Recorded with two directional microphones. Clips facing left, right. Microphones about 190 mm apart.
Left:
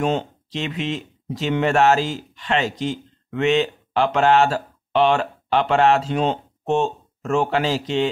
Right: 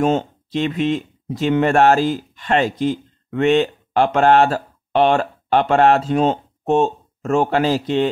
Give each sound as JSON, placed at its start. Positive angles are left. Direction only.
{"t": 0.0, "sound": "speech", "side_deg": -50}